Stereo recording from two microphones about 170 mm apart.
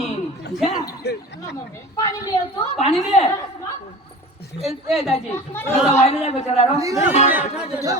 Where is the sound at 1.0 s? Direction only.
75° left (ahead or behind).